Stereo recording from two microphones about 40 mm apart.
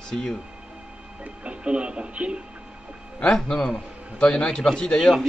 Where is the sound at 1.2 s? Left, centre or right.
Right.